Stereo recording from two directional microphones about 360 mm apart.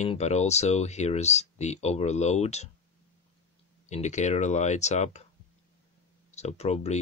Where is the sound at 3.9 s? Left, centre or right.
Centre.